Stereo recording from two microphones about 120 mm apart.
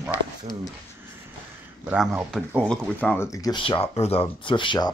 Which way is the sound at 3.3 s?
30° left (ahead or behind).